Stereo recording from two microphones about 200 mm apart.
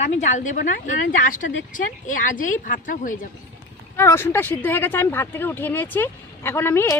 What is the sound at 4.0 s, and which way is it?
Speech, 10° left (ahead or behind).